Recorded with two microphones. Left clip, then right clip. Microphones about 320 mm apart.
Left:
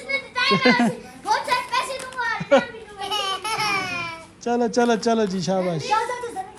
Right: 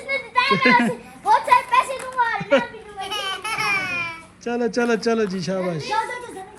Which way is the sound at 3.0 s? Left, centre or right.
Left.